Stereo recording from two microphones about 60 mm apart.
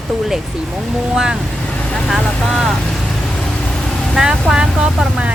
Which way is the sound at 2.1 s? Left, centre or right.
Centre.